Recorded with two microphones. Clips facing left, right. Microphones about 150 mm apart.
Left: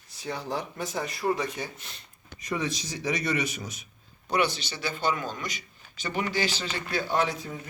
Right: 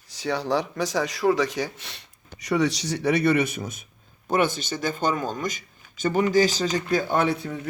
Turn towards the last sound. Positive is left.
turn(degrees=-65)  # may be behind; listen again after turning